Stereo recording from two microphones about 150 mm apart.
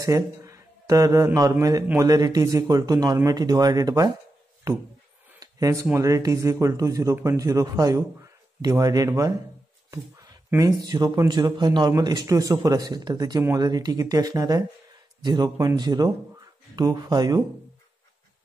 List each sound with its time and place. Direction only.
0.0 s speech: 20° right (ahead or behind)
5.4 s a sound: 20° right (ahead or behind)
5.9 s speech: 20° right (ahead or behind)
10.5 s speech: 25° right (ahead or behind)